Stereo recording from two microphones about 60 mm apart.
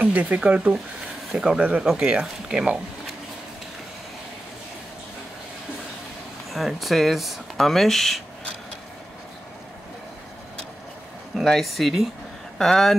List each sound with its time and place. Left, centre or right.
0.0 s speech: right; by 1.6 s centre
1.6 s speech: right
6.5 s speech: centre
11.3 s speech: centre